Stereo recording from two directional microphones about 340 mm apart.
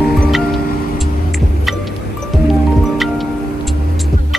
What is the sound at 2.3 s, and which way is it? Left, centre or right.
Music, centre.